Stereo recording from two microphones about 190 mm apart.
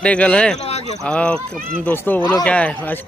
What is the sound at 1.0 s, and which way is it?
A man's voice, 5° left (ahead or behind).